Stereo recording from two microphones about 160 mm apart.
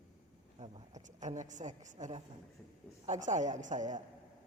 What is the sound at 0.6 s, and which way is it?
A woman's voice, 45° right (ahead or behind).